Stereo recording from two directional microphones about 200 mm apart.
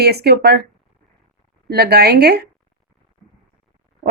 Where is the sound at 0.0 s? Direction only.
55° right (ahead or behind).